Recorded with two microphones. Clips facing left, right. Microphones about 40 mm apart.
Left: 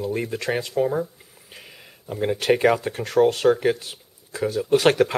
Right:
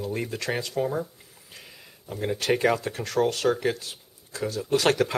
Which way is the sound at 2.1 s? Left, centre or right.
Centre.